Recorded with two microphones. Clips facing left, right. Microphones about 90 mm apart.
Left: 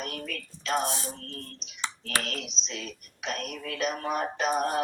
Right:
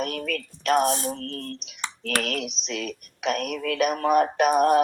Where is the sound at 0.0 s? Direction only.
60° right (ahead or behind).